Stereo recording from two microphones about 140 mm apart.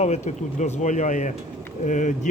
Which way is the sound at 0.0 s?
55° left (ahead or behind).